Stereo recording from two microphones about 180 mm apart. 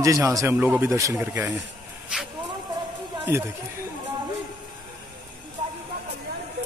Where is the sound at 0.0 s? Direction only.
15° right (ahead or behind).